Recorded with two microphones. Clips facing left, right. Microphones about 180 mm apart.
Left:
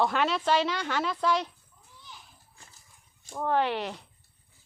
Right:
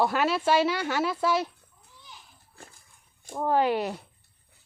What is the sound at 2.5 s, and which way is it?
Dog, 55° right (ahead or behind).